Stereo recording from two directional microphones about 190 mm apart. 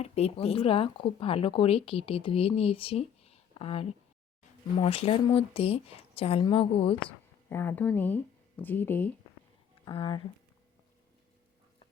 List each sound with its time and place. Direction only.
0.0 s speech: 35° left (ahead or behind)
7.5 s speech: 10° left (ahead or behind)
9.8 s speech: 25° left (ahead or behind)